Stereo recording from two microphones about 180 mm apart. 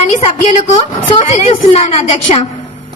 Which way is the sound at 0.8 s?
30° left (ahead or behind).